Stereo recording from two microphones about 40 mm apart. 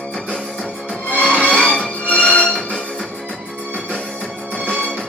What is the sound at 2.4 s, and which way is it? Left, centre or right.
Music, centre.